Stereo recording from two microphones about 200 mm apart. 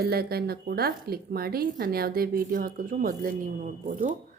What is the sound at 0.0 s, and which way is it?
A woman's voice, 50° right (ahead or behind).